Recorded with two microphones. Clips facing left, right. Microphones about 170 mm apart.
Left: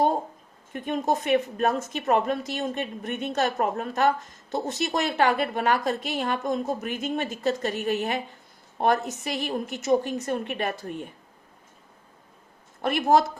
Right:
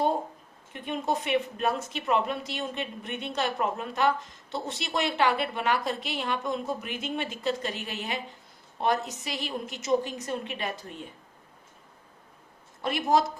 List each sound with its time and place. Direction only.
0.7 s speech: 45° left (ahead or behind)
12.8 s speech: 55° left (ahead or behind)